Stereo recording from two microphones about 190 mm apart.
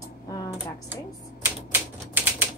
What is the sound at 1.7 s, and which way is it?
Typewriter, 10° right (ahead or behind).